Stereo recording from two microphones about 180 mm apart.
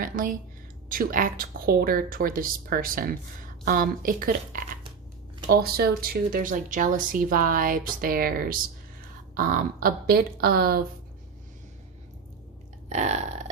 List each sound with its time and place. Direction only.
0.0 s speech: 50° right (ahead or behind)
12.9 s burping: 40° right (ahead or behind)